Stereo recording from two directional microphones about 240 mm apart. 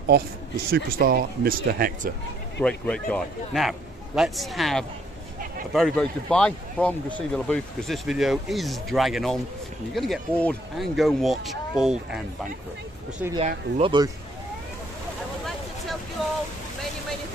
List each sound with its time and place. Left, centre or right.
0.7 s speech: right
2.6 s speech: centre
13.4 s speech: right